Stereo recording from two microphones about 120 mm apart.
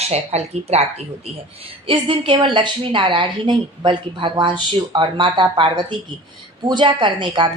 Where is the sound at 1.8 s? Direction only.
45° right (ahead or behind).